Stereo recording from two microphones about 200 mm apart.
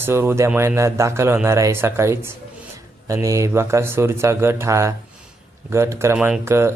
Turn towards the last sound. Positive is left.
turn(degrees=-15)  # may be behind; listen again after turning